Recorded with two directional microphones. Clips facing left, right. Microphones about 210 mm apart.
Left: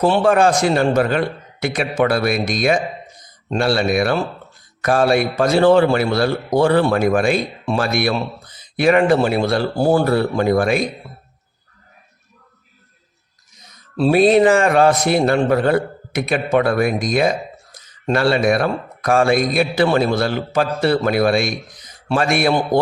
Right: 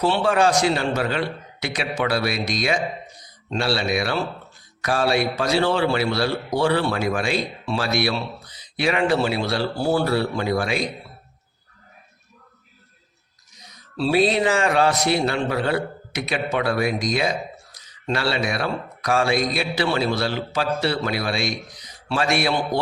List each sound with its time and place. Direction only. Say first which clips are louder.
0.0 s speech: left 5 dB; 50° left (ahead or behind)
13.6 s speech: left 6 dB; 50° left (ahead or behind)